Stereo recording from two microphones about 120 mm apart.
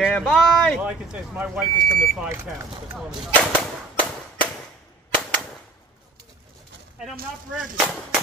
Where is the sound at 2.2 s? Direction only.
20° right (ahead or behind).